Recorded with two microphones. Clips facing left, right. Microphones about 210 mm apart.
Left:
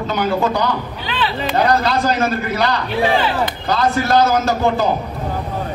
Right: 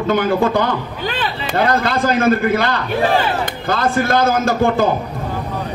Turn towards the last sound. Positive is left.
turn(degrees=-50)  # may be behind; listen again after turning